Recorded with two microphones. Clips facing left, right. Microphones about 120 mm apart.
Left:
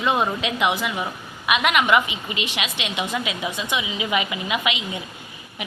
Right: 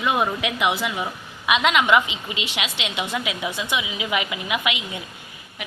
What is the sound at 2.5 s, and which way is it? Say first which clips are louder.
Speech: left 1 dB; 15° right (ahead or behind).